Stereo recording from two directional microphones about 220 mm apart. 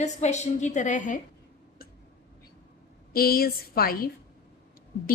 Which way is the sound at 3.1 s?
45° left (ahead or behind).